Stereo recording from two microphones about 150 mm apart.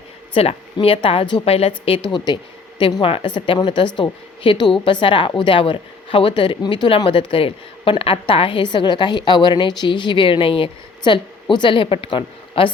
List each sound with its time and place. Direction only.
0.3 s speech: 40° left (ahead or behind)
2.1 s speech: 30° left (ahead or behind)